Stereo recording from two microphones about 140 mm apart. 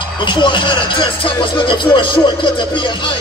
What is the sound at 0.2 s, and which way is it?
Speech, 35° left (ahead or behind).